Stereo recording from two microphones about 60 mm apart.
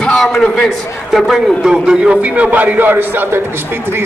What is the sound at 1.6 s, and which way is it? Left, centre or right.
Speech, centre.